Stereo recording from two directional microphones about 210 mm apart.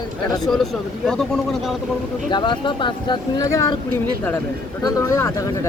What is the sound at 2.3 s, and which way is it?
Speech, 20° left (ahead or behind).